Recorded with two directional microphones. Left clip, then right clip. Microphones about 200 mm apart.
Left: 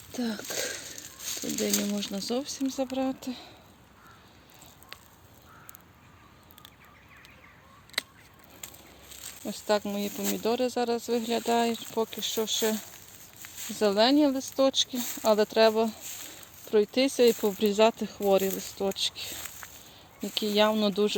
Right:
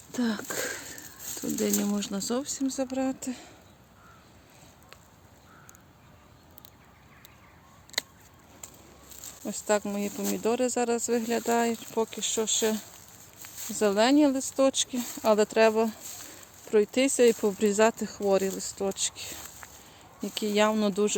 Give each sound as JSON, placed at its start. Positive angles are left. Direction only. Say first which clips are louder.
{"t": 0.1, "sound": "speech", "louder": "right 2 dB", "side_deg": -15}
{"t": 8.0, "sound": "a sound", "louder": "even", "side_deg": -25}
{"t": 9.2, "sound": "speech", "louder": "even", "side_deg": 0}